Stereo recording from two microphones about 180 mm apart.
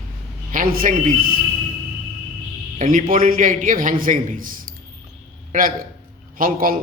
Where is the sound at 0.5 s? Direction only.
50° right (ahead or behind).